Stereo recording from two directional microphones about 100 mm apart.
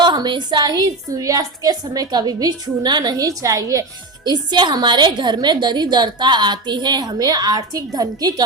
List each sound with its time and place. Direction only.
0.0 s a woman's voice: 45° right (ahead or behind)
4.3 s a woman's voice: 45° right (ahead or behind)